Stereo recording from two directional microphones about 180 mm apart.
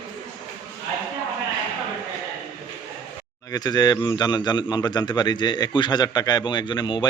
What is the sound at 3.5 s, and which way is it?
A man's voice, 20° left (ahead or behind).